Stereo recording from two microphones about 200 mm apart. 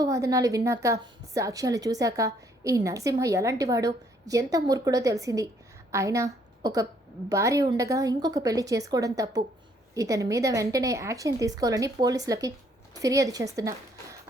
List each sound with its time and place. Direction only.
0.0 s a woman's voice: 15° right (ahead or behind)